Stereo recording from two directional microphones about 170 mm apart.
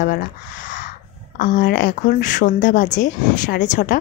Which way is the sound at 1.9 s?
50° left (ahead or behind).